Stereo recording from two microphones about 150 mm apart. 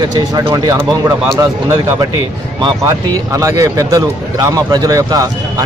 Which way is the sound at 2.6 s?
20° right (ahead or behind).